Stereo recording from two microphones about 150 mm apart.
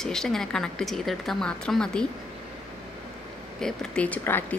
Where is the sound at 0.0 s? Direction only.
5° left (ahead or behind).